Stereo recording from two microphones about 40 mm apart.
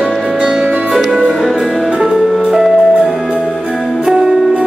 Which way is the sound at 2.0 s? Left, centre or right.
Centre.